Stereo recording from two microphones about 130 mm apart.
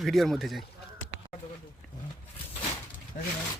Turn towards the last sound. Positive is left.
turn(degrees=90)